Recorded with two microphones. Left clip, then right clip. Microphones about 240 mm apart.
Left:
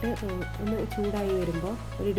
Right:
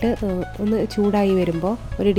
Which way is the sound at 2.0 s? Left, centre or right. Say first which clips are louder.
Right 10 dB; right.